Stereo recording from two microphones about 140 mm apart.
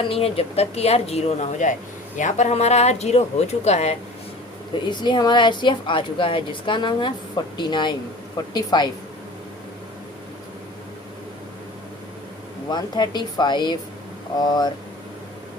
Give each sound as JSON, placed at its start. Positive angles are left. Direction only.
{"t": 0.1, "sound": "speech", "side_deg": 45}
{"t": 4.9, "sound": "a woman's voice", "side_deg": 30}
{"t": 12.7, "sound": "a woman's voice", "side_deg": 30}